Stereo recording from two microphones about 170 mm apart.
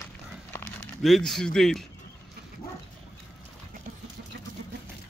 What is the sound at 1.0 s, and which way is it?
Speech, centre (ahead or behind).